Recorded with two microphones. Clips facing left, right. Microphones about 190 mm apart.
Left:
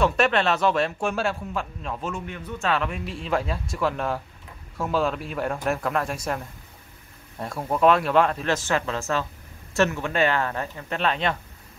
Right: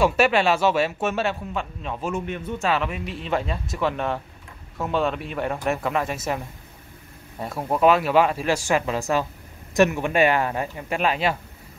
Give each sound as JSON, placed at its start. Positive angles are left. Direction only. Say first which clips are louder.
{"t": 0.0, "sound": "speech", "louder": "right 2 dB", "side_deg": -5}
{"t": 2.1, "sound": "a man's voice", "louder": "right 6 dB", "side_deg": -20}
{"t": 2.6, "sound": "speech", "louder": "even", "side_deg": -5}